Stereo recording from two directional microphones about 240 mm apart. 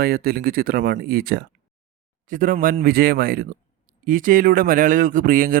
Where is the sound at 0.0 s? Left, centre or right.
Right.